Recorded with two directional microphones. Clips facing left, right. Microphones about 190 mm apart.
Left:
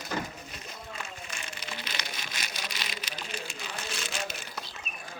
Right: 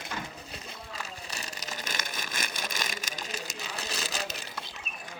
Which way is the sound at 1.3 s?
35° right (ahead or behind).